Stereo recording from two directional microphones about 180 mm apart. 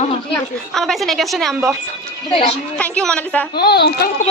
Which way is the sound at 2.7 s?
5° left (ahead or behind).